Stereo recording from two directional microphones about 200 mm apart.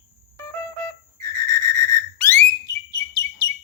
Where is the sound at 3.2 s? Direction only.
15° left (ahead or behind).